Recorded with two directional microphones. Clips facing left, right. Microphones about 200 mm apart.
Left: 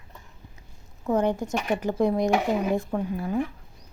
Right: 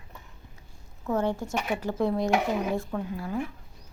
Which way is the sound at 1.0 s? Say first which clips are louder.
Left 4 dB; 15° left (ahead or behind).